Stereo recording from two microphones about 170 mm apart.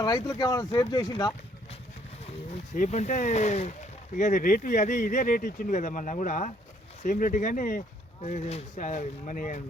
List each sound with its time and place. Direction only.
0.0 s speech: 25° left (ahead or behind)
2.7 s speech: 45° left (ahead or behind)